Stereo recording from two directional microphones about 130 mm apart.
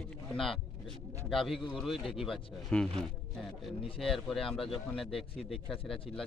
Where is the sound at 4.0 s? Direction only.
5° left (ahead or behind).